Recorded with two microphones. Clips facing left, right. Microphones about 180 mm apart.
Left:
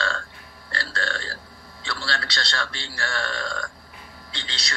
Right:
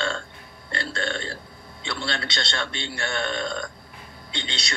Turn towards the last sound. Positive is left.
turn(degrees=-25)  # may be behind; listen again after turning